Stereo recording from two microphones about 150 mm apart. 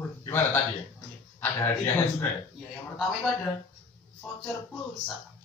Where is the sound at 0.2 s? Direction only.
15° left (ahead or behind).